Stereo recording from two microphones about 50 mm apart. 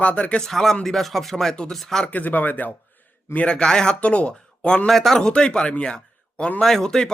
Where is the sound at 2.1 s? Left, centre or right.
Left.